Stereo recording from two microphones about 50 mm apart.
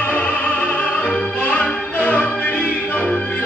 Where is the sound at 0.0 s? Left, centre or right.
Left.